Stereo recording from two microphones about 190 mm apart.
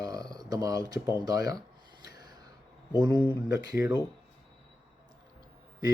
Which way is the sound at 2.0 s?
20° right (ahead or behind).